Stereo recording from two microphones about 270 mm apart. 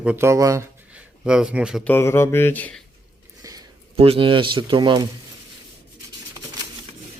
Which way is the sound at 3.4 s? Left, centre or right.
Centre.